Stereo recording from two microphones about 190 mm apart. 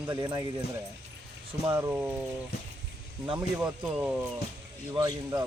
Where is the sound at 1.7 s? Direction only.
10° right (ahead or behind).